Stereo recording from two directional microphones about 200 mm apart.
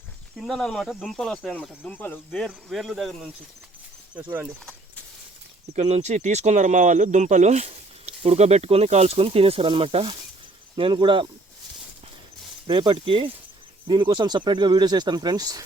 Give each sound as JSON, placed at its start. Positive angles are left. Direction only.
{"t": 0.3, "sound": "speech", "side_deg": 0}
{"t": 5.7, "sound": "speech", "side_deg": -35}
{"t": 12.6, "sound": "speech", "side_deg": -25}